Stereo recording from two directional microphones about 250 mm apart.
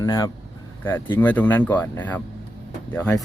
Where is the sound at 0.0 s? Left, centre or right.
Centre.